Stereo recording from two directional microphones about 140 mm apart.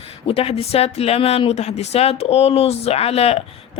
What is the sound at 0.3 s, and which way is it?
Speech, 45° left (ahead or behind).